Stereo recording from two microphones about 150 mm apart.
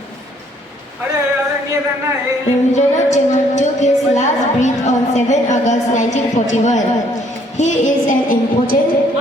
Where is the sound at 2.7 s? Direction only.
50° left (ahead or behind).